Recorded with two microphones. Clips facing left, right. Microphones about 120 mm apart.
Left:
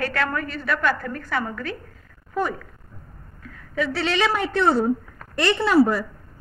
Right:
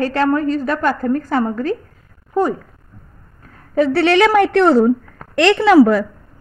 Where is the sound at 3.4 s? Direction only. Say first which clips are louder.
Right 10 dB; 40° right (ahead or behind).